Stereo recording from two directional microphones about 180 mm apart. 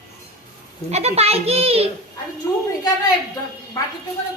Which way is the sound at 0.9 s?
35° right (ahead or behind).